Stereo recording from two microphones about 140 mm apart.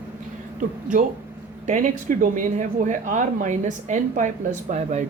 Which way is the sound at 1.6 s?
60° right (ahead or behind).